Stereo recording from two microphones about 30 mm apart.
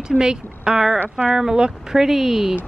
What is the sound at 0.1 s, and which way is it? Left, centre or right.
A woman's voice, right.